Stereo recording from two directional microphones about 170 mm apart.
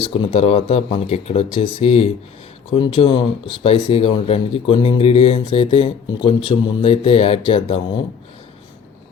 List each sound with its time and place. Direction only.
0.0 s speech: 30° left (ahead or behind)